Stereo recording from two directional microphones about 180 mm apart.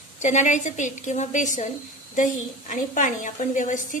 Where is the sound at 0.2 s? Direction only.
40° left (ahead or behind).